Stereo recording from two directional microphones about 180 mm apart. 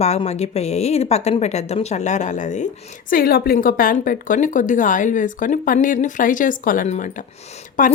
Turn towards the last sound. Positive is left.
turn(degrees=50)  # may be behind; listen again after turning